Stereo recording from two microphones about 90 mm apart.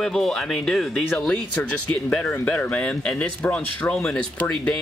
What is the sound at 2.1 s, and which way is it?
Speech, 15° left (ahead or behind).